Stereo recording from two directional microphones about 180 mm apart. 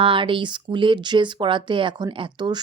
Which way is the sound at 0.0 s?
30° right (ahead or behind).